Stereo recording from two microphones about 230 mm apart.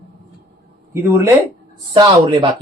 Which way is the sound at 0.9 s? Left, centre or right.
Centre.